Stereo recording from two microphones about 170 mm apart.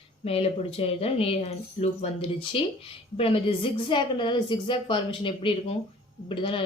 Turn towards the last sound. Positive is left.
turn(degrees=30)  # may be behind; listen again after turning